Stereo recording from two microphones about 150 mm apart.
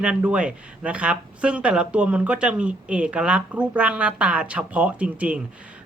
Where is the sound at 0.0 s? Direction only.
10° right (ahead or behind).